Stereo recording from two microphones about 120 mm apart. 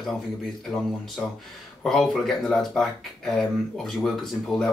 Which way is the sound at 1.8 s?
5° left (ahead or behind).